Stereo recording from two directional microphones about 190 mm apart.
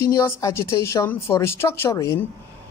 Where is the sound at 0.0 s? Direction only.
15° left (ahead or behind).